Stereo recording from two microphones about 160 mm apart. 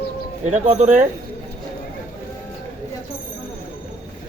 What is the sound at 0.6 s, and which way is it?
Speech, 45° right (ahead or behind).